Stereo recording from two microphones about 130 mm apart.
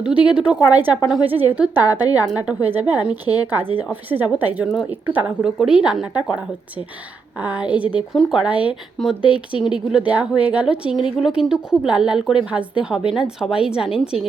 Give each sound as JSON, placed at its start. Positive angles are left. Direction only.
{"t": 0.0, "sound": "a woman's voice", "side_deg": -10}
{"t": 1.8, "sound": "a woman's voice", "side_deg": 30}
{"t": 2.3, "sound": "a woman's voice", "side_deg": -10}